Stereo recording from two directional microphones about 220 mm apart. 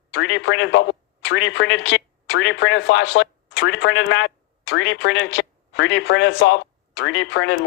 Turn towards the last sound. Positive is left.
turn(degrees=55)  # may be behind; listen again after turning